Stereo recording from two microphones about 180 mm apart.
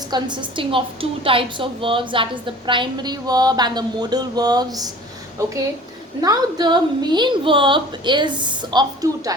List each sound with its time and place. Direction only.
0.1 s a woman's voice: 25° right (ahead or behind)
6.2 s a woman's voice: 20° right (ahead or behind)